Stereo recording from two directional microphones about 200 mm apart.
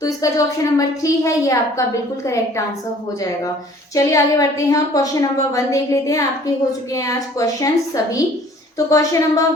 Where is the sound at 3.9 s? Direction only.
15° left (ahead or behind).